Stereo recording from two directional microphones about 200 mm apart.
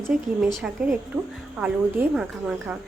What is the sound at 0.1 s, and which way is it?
A woman's voice, 5° right (ahead or behind).